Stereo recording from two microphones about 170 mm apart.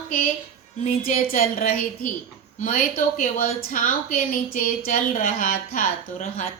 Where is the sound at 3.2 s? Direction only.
40° left (ahead or behind).